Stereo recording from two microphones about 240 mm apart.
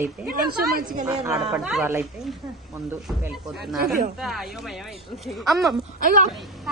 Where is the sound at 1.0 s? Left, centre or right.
Centre.